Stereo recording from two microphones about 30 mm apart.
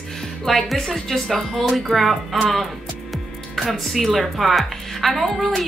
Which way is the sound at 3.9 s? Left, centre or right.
Centre.